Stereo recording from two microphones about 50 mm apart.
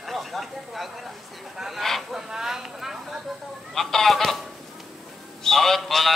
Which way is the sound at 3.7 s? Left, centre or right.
Centre.